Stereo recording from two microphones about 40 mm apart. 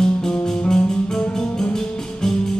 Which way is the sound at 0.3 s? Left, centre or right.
Centre.